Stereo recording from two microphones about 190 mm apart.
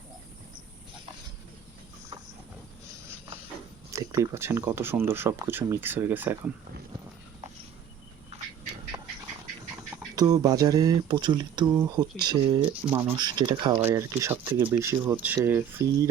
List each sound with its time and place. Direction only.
3.9 s speech: 15° right (ahead or behind)
10.2 s speech: 20° right (ahead or behind)
12.8 s speech: 10° right (ahead or behind)
13.1 s speech: 20° right (ahead or behind)